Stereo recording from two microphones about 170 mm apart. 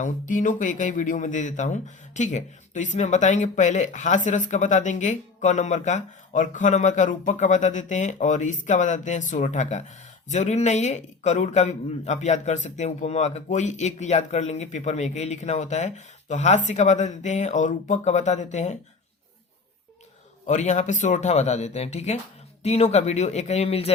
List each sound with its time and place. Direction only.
0.0 s speech: 50° left (ahead or behind)
20.5 s speech: 45° left (ahead or behind)